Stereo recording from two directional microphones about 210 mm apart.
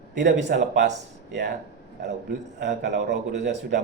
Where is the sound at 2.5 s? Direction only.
55° right (ahead or behind).